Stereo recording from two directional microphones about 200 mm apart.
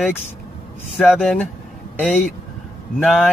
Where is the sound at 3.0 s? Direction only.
Centre (ahead or behind).